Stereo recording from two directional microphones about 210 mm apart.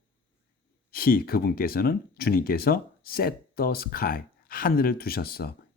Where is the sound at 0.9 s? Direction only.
45° left (ahead or behind).